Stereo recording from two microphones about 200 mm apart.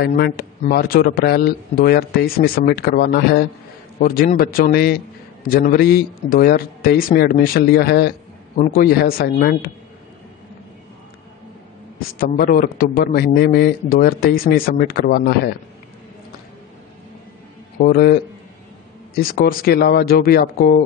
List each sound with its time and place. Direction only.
0.0 s speech: 50° left (ahead or behind)
12.2 s speech: 45° left (ahead or behind)
17.7 s speech: 45° left (ahead or behind)